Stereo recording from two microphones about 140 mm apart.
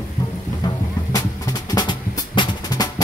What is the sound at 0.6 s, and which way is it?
Music, 30° left (ahead or behind).